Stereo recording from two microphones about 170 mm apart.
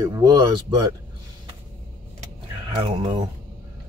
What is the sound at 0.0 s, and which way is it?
Speech, 20° right (ahead or behind).